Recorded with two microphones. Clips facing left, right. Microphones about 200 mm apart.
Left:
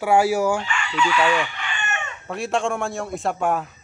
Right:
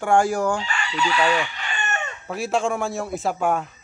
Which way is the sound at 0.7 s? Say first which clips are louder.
Left 2 dB; 35° right (ahead or behind).